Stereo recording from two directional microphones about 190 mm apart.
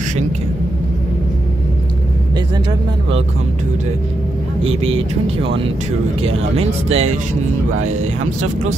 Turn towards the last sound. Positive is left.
turn(degrees=-30)  # may be behind; listen again after turning